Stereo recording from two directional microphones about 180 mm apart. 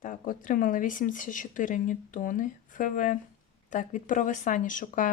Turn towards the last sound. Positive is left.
turn(degrees=45)  # may be behind; listen again after turning